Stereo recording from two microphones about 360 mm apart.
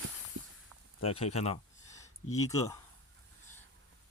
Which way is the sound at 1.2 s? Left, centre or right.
Centre.